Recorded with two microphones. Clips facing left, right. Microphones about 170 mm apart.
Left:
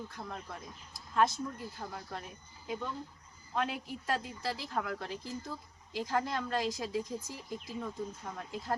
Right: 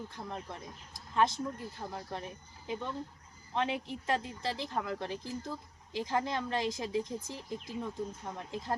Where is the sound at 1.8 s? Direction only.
20° right (ahead or behind).